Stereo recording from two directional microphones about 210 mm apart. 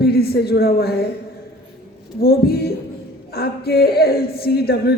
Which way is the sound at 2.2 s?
45° left (ahead or behind).